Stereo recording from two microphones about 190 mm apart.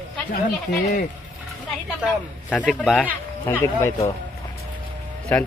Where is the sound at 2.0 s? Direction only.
5° left (ahead or behind).